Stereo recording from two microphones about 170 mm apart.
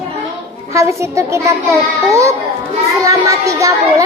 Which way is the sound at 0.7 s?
15° right (ahead or behind).